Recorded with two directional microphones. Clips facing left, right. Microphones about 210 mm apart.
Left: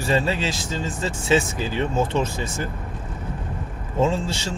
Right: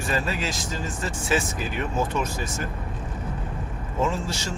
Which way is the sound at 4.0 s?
30° left (ahead or behind).